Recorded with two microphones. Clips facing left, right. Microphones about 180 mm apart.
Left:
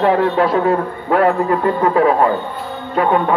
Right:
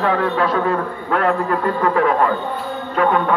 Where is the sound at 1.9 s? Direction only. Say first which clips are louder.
Left 4 dB; 25° left (ahead or behind).